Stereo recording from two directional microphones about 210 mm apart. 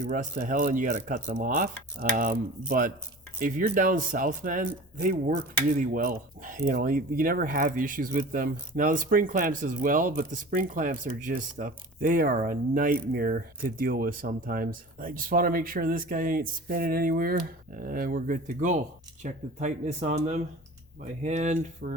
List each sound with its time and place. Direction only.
0.1 s speech: 40° right (ahead or behind)